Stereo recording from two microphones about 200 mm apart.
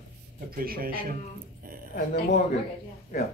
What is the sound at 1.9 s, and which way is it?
Speech, 50° left (ahead or behind).